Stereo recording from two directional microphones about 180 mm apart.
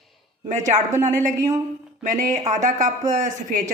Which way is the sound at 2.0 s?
45° right (ahead or behind).